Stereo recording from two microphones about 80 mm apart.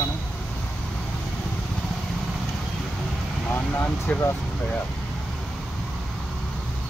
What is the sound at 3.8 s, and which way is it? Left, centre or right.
Speech, centre.